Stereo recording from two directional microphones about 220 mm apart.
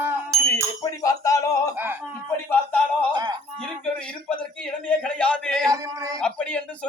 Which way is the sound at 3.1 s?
20° right (ahead or behind).